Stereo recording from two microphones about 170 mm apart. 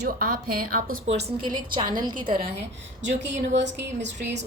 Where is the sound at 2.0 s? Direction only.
25° right (ahead or behind).